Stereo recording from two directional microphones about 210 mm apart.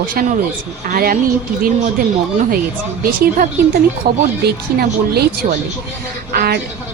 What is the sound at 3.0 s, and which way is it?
A woman's voice, 45° right (ahead or behind).